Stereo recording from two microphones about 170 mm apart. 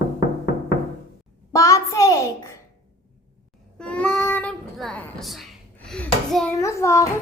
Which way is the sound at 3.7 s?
5° left (ahead or behind).